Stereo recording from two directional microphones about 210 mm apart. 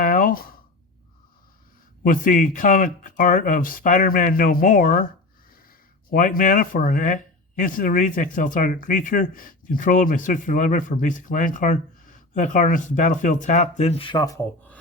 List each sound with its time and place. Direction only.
0.0 s a sound: 40° left (ahead or behind)
2.0 s speech: 40° left (ahead or behind)
6.1 s speech: 40° left (ahead or behind); by 14.4 s 15° left (ahead or behind)